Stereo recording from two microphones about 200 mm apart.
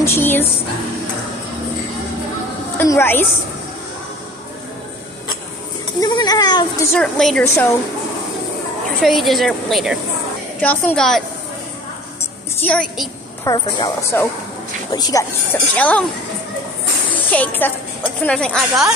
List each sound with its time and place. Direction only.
0.0 s a woman's voice: 10° left (ahead or behind)
2.8 s a woman's voice: 10° left (ahead or behind)
5.9 s a sound: 20° left (ahead or behind)
6.9 s a woman's voice: centre (ahead or behind)
7.4 s a woman's voice: 15° left (ahead or behind)
9.0 s a woman's voice: centre (ahead or behind)
12.5 s a woman's voice: 5° left (ahead or behind)
13.4 s a woman's voice: 15° left (ahead or behind)
15.7 s a woman's voice: 5° left (ahead or behind)
17.3 s a woman's voice: 10° left (ahead or behind)